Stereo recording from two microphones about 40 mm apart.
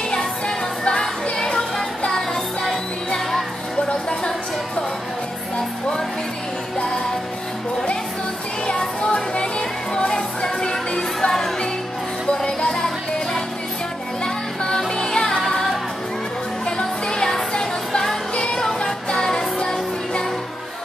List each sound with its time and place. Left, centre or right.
0.8 s music: left
8.6 s music: left
12.4 s music: left
14.2 s music: centre
16.6 s music: centre